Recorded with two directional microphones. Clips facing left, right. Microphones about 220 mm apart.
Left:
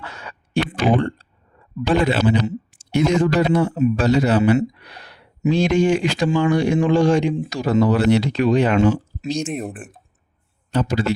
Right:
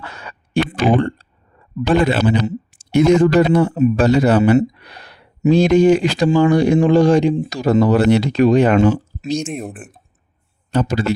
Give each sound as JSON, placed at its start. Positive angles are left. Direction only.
{"t": 0.0, "sound": "a sound", "side_deg": -50}
{"t": 1.9, "sound": "a man's voice", "side_deg": -50}
{"t": 9.4, "sound": "speech", "side_deg": 0}
{"t": 10.7, "sound": "speech", "side_deg": -45}